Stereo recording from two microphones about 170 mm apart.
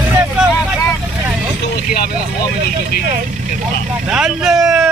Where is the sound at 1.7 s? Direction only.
65° left (ahead or behind).